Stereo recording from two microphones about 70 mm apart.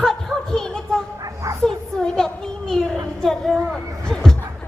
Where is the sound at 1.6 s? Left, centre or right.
Centre.